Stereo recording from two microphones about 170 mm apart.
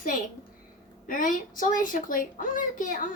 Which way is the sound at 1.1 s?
50° left (ahead or behind).